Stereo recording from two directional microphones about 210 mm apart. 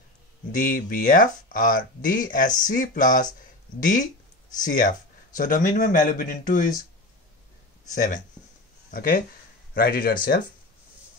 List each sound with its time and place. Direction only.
0.5 s speech: 40° left (ahead or behind)
4.6 s speech: 40° left (ahead or behind)
7.9 s speech: 40° left (ahead or behind)